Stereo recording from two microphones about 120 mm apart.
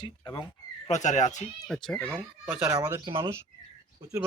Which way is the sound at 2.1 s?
5° right (ahead or behind).